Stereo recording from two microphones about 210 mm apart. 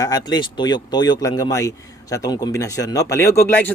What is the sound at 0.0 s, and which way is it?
Speech, 20° left (ahead or behind).